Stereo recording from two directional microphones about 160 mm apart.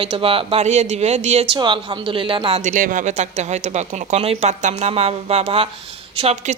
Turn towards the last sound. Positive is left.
turn(degrees=-40)  # may be behind; listen again after turning